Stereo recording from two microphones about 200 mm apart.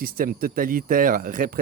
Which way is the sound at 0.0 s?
45° right (ahead or behind).